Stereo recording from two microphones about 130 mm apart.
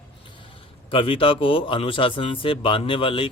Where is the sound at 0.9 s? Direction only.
45° left (ahead or behind).